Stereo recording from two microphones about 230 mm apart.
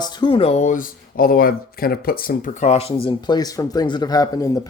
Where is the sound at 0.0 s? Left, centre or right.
Left.